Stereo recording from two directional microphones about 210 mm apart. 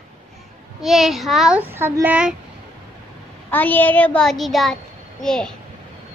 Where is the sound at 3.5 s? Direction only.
10° left (ahead or behind).